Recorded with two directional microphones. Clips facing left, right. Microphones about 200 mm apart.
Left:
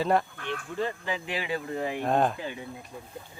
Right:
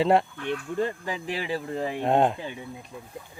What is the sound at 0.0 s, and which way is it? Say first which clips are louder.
Speech: right 4 dB; 25° right (ahead or behind).